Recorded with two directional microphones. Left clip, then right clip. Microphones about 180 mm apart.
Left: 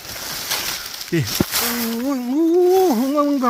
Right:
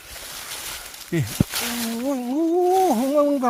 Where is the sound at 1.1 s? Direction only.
5° left (ahead or behind).